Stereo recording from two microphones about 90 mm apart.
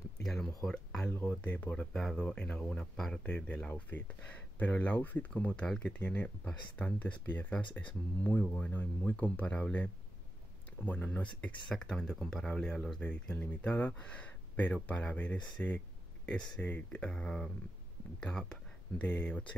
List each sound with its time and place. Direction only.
0.2 s a sound: 5° left (ahead or behind)
0.6 s speech: 5° left (ahead or behind)
1.0 s speech: 20° left (ahead or behind)